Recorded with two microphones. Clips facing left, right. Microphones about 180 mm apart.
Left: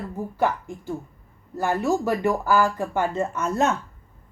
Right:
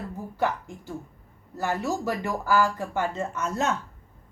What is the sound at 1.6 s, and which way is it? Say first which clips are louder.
Speech: left 5 dB; 55° left (ahead or behind).